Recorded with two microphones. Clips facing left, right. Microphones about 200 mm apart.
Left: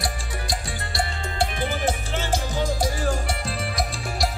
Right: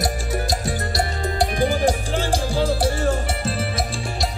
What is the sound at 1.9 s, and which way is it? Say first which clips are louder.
Music: right 4 dB; 15° right (ahead or behind).